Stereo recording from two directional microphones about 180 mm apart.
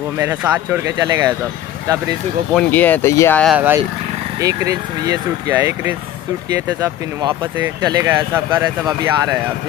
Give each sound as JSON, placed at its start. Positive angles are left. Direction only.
{"t": 0.2, "sound": "speech", "side_deg": -10}
{"t": 2.5, "sound": "speech", "side_deg": 10}
{"t": 3.4, "sound": "speech", "side_deg": -10}